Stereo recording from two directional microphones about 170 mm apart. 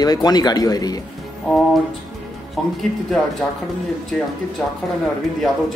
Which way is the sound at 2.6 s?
Centre (ahead or behind).